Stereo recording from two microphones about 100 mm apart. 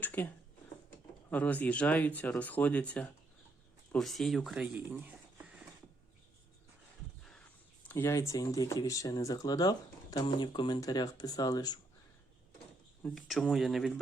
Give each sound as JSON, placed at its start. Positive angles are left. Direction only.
{"t": 0.0, "sound": "speech", "side_deg": 15}
{"t": 1.3, "sound": "speech", "side_deg": 15}
{"t": 3.9, "sound": "speech", "side_deg": 5}
{"t": 4.9, "sound": "speech", "side_deg": -20}
{"t": 7.9, "sound": "speech", "side_deg": 25}
{"t": 8.3, "sound": "speech", "side_deg": 35}
{"t": 10.8, "sound": "speech", "side_deg": 40}
{"t": 13.1, "sound": "speech", "side_deg": 0}